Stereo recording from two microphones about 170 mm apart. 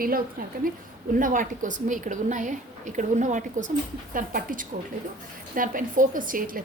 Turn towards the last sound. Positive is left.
turn(degrees=-55)  # may be behind; listen again after turning